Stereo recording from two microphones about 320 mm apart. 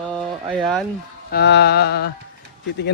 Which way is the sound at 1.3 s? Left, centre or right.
Left.